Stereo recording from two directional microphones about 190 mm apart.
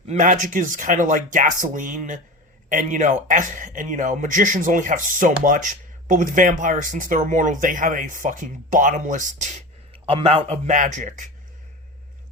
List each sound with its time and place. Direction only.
0.1 s speech: 45° right (ahead or behind)